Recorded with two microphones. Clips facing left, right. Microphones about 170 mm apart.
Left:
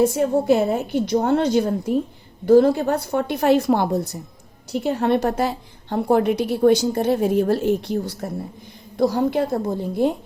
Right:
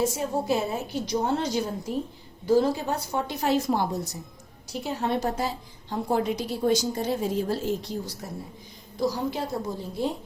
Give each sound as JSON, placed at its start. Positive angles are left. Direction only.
{"t": 0.0, "sound": "a woman's voice", "side_deg": 60}